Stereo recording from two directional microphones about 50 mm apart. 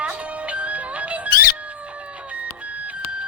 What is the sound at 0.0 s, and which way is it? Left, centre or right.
Music, right.